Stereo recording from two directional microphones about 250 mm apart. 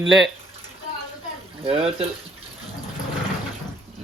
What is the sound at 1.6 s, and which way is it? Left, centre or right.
Speech, right.